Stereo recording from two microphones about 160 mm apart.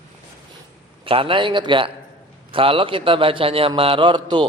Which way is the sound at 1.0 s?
35° right (ahead or behind).